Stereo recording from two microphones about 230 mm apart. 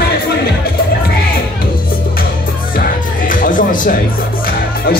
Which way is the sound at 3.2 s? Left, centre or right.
Left.